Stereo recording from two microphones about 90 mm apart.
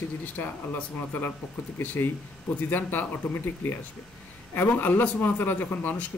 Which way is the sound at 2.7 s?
20° left (ahead or behind).